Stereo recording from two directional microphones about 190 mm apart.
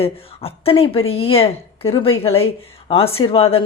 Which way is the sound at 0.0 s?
30° left (ahead or behind).